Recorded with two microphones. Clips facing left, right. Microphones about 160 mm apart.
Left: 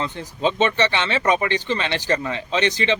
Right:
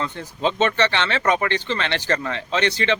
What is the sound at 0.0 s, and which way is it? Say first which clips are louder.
Speech: left 1 dB; 15° left (ahead or behind).